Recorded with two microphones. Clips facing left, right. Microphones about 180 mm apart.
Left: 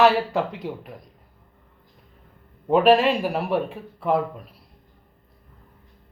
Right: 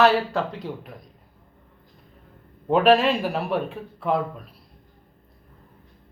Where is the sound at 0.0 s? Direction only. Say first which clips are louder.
Left 1 dB; 15° left (ahead or behind).